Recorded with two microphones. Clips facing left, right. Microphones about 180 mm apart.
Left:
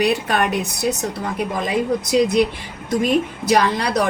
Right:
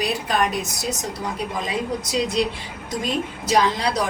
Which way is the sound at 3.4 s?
65° left (ahead or behind).